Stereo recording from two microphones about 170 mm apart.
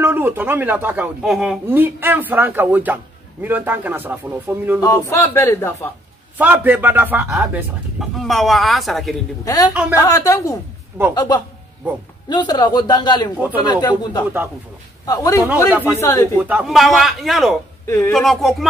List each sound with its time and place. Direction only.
0.0 s speech: 10° right (ahead or behind)
5.1 s a man's voice: 15° left (ahead or behind)
6.3 s speech: 10° right (ahead or behind)
9.4 s a man's voice: 20° left (ahead or behind)
15.4 s speech: 10° right (ahead or behind)
16.0 s a man's voice: 15° left (ahead or behind)
16.3 s speech: 10° right (ahead or behind)
17.8 s a man's voice: 15° left (ahead or behind)
18.1 s speech: centre (ahead or behind)